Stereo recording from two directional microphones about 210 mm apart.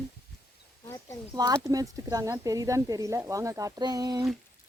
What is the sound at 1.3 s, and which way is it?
Speech, 20° right (ahead or behind).